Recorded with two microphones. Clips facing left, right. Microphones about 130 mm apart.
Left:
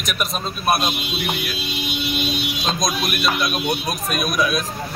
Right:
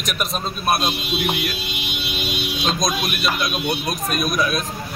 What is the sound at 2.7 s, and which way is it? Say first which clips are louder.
A man's voice: even; centre (ahead or behind).